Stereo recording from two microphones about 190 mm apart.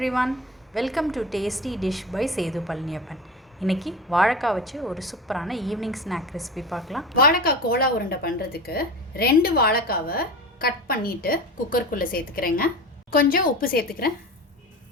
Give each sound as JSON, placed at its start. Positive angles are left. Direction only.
{"t": 0.0, "sound": "a woman's voice", "side_deg": 0}
{"t": 7.2, "sound": "a woman's voice", "side_deg": 50}